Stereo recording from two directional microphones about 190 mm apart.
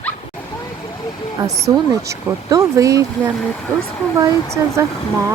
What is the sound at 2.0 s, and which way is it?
Speech, 15° right (ahead or behind).